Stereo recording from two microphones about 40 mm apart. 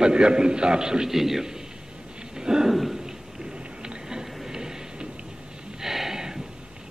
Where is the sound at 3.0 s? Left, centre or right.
Centre.